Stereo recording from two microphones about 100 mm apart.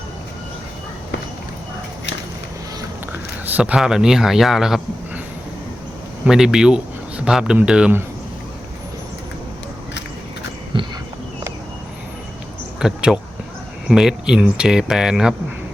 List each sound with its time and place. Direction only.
3.1 s speech: 15° right (ahead or behind)
6.2 s speech: 5° right (ahead or behind)
10.7 s a sound: 55° right (ahead or behind)
12.8 s speech: 5° right (ahead or behind)